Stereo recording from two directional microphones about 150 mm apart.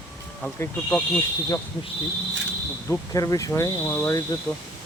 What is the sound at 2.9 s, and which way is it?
Speech, 20° left (ahead or behind).